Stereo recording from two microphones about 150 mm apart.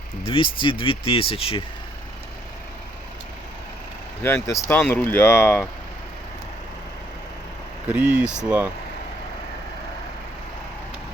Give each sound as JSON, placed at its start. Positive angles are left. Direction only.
{"t": 0.2, "sound": "speech", "side_deg": 35}
{"t": 4.2, "sound": "speech", "side_deg": 15}
{"t": 7.9, "sound": "speech", "side_deg": -10}